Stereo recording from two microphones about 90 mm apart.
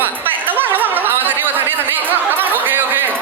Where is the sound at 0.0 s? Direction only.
20° right (ahead or behind).